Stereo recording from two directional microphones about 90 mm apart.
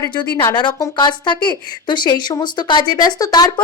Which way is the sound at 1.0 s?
55° left (ahead or behind).